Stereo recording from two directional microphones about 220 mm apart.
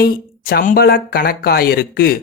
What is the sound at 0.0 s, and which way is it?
Speech, 45° left (ahead or behind).